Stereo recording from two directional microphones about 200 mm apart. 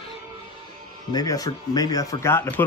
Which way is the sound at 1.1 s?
20° left (ahead or behind).